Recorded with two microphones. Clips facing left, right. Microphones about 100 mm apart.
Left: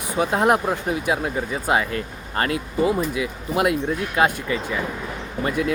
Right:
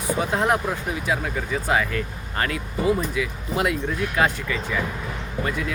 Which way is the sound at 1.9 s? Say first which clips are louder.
Left 1 dB; 30° left (ahead or behind).